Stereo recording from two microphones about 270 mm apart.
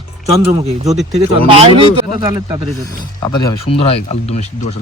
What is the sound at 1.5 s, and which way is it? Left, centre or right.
Speech, centre.